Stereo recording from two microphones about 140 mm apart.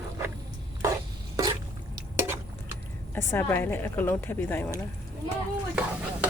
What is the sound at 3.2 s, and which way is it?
A woman's voice, 15° left (ahead or behind).